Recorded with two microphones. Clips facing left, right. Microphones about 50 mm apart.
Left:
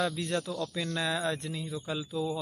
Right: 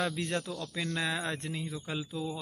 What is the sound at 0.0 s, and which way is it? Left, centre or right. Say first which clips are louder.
Speech: left 2 dB; right.